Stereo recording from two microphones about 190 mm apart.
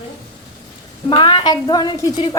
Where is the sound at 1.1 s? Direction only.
25° left (ahead or behind).